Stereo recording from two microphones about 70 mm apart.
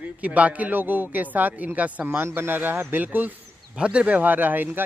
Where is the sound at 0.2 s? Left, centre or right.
Right.